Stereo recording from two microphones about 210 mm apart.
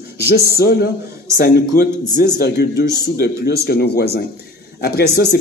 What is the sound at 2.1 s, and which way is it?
Speech, 50° left (ahead or behind).